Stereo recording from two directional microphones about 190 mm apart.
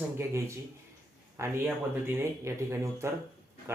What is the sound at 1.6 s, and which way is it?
A man's voice, 10° right (ahead or behind).